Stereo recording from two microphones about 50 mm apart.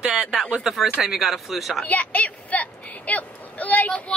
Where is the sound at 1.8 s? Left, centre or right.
Left.